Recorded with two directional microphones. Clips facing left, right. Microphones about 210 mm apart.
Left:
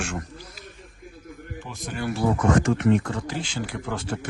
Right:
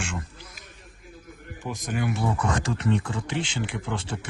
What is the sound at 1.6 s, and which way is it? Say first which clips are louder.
Speech: right 4 dB; 15° right (ahead or behind).